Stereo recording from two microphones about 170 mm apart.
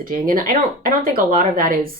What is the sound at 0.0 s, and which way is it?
Speech, 55° right (ahead or behind).